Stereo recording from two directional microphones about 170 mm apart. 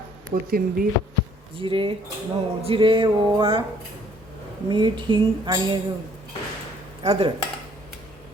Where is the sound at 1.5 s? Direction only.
30° right (ahead or behind).